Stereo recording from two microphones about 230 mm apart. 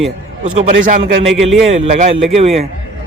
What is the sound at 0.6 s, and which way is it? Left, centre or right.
A man's voice, right.